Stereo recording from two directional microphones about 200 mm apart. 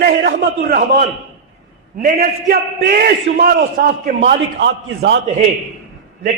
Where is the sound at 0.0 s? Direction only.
55° right (ahead or behind).